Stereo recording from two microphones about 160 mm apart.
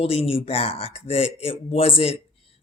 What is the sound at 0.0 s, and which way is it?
A man's voice, 35° left (ahead or behind).